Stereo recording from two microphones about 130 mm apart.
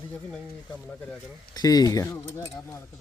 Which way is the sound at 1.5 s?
30° left (ahead or behind).